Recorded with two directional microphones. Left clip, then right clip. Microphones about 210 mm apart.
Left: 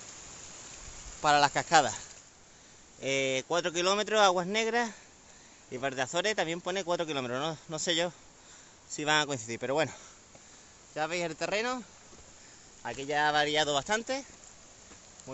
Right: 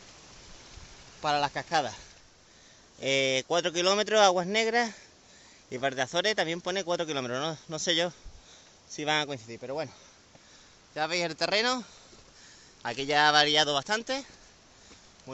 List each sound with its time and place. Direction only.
1.2 s speech: 5° left (ahead or behind)
3.0 s speech: 10° right (ahead or behind)
9.5 s speech: 20° left (ahead or behind)
11.0 s speech: 15° right (ahead or behind)
12.8 s speech: 25° right (ahead or behind); by 14.2 s 10° right (ahead or behind)
15.3 s speech: 15° right (ahead or behind)